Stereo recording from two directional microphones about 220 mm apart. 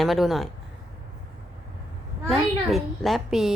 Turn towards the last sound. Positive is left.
turn(degrees=0)  # may be behind; listen again after turning